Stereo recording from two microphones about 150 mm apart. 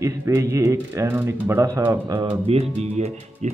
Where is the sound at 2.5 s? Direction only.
45° right (ahead or behind).